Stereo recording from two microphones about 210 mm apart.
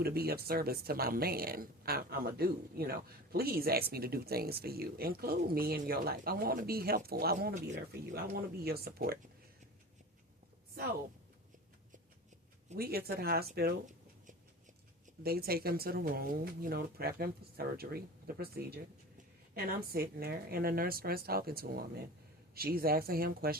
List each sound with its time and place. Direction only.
0.0 s speech: 45° right (ahead or behind)
12.7 s speech: 45° right (ahead or behind)